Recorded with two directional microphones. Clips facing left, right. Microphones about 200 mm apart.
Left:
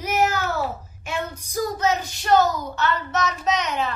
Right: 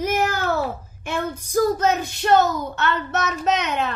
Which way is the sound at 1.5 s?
55° right (ahead or behind).